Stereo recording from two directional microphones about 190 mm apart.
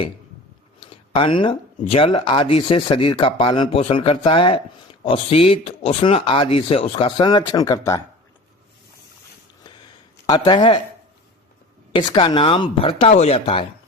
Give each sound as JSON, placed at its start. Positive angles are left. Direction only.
{"t": 0.8, "sound": "speech", "side_deg": 25}
{"t": 10.2, "sound": "speech", "side_deg": 25}
{"t": 11.9, "sound": "speech", "side_deg": 25}